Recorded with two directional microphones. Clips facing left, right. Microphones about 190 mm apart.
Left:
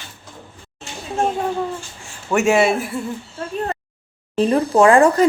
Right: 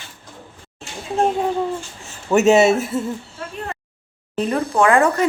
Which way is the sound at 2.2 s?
20° right (ahead or behind).